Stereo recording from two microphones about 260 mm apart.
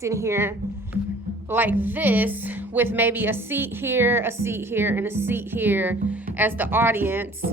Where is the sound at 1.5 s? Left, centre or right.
Centre.